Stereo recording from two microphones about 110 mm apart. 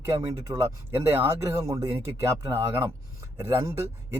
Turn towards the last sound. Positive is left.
turn(degrees=-25)  # may be behind; listen again after turning